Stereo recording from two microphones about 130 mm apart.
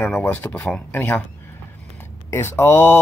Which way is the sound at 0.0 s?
15° left (ahead or behind).